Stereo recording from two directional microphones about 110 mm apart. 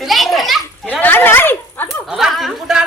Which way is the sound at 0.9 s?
15° left (ahead or behind).